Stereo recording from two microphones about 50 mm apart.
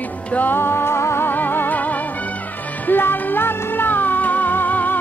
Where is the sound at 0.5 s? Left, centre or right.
Left.